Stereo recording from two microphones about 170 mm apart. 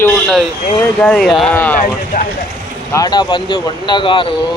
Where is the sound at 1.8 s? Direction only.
50° left (ahead or behind).